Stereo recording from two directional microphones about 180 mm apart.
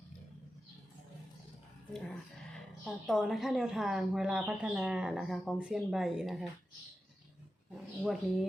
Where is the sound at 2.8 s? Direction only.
Centre (ahead or behind).